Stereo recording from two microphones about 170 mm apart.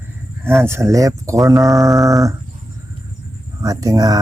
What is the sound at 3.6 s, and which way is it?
Speech, 20° right (ahead or behind).